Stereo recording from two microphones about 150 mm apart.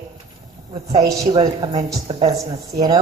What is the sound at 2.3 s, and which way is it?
Speech, 25° right (ahead or behind).